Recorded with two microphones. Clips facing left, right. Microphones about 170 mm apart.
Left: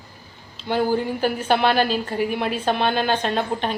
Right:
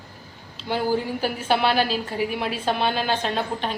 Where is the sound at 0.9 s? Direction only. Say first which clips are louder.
Left 3 dB; 5° right (ahead or behind).